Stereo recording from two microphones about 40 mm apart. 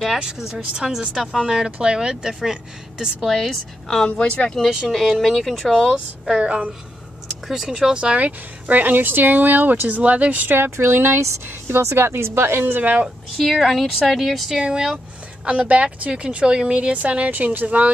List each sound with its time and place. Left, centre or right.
0.2 s speech: centre
3.3 s a woman's voice: centre
4.2 s speech: left
4.8 s speech: centre
6.4 s speech: right
7.4 s speech: centre
7.9 s speech: right
8.3 s speech: right
10.5 s speech: right
13.4 s speech: centre
14.6 s speech: centre
15.4 s speech: right
16.9 s speech: right